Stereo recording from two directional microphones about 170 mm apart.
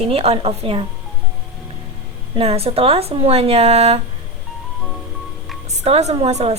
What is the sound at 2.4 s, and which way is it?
A woman's voice, 35° right (ahead or behind).